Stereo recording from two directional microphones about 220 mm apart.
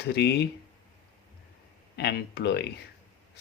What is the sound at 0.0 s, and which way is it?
Speech, 50° left (ahead or behind).